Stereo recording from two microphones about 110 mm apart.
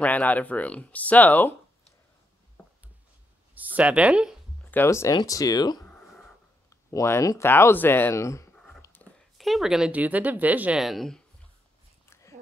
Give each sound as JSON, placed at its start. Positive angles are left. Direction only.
{"t": 0.0, "sound": "speech", "side_deg": 15}
{"t": 3.5, "sound": "speech", "side_deg": -15}
{"t": 4.8, "sound": "speech", "side_deg": 30}
{"t": 8.5, "sound": "a sound", "side_deg": 5}
{"t": 9.4, "sound": "a woman's voice", "side_deg": 0}
{"t": 10.8, "sound": "speech", "side_deg": 0}
{"t": 12.1, "sound": "a sound", "side_deg": 25}